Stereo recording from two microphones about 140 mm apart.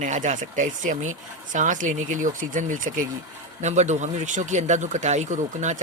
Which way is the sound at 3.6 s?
55° right (ahead or behind).